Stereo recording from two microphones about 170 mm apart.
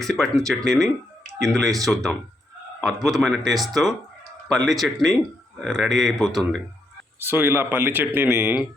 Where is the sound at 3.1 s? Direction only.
Centre (ahead or behind).